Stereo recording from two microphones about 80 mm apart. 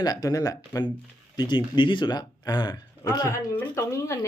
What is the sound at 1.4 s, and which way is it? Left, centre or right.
Speech, left.